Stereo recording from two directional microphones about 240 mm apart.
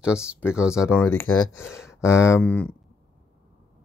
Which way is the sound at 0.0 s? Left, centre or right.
Centre.